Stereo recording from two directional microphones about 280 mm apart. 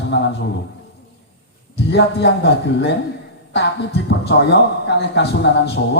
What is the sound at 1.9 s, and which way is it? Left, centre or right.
A man's voice, left.